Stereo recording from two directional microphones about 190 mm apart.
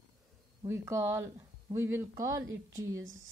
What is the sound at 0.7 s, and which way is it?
Speech, 15° right (ahead or behind).